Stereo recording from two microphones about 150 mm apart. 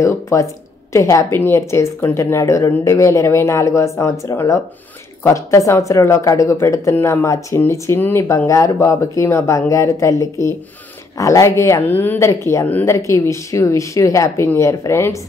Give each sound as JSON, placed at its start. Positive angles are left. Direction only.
{"t": 0.0, "sound": "speech", "side_deg": 20}